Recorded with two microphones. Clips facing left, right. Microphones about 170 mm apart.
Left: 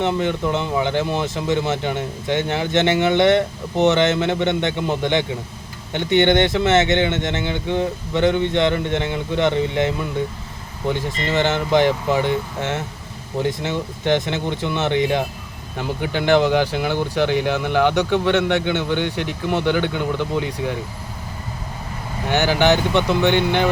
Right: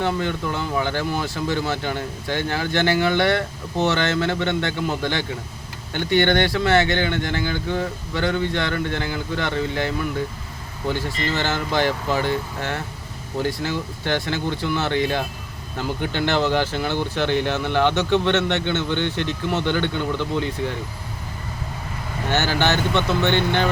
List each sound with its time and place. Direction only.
0.0 s speech: 20° left (ahead or behind)
22.3 s speech: 15° left (ahead or behind)